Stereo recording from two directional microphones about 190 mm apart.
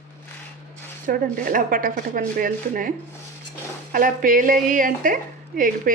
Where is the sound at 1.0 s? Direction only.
45° right (ahead or behind).